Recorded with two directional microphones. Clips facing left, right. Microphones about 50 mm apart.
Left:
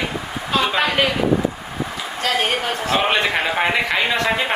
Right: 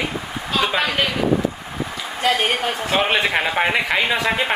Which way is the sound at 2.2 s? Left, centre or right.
Centre.